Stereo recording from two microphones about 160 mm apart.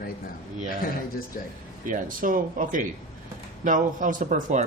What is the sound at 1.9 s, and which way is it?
Speech, 55° right (ahead or behind).